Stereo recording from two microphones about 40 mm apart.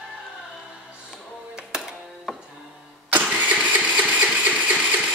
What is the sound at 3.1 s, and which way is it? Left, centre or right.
Engine starting, right.